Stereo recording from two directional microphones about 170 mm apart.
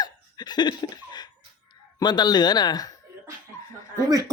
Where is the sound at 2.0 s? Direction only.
25° left (ahead or behind).